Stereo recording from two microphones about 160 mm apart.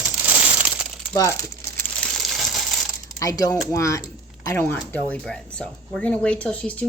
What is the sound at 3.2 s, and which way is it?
Speech, 20° left (ahead or behind).